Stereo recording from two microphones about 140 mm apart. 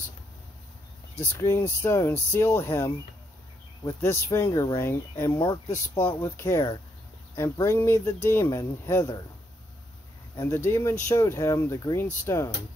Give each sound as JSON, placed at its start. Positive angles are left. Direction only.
{"t": 1.1, "sound": "speech", "side_deg": 15}
{"t": 5.4, "sound": "speech", "side_deg": 30}
{"t": 10.3, "sound": "speech", "side_deg": 20}